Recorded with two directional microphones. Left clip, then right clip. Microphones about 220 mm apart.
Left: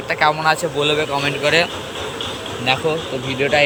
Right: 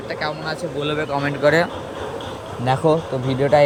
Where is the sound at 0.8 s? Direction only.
10° right (ahead or behind).